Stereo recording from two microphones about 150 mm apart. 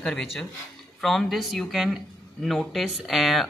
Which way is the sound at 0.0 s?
5° left (ahead or behind).